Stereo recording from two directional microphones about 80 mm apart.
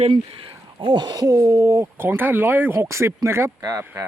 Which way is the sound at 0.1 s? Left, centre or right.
Right.